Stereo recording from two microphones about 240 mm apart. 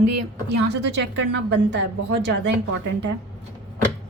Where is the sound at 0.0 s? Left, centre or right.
Right.